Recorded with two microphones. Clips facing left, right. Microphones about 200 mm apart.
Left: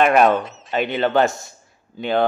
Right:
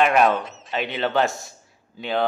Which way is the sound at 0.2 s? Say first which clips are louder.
Left 3 dB; centre (ahead or behind).